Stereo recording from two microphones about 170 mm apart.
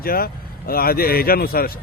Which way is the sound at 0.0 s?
60° left (ahead or behind).